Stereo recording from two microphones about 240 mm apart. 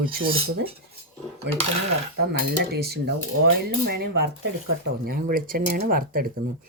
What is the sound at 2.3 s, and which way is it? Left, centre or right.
Speech, right.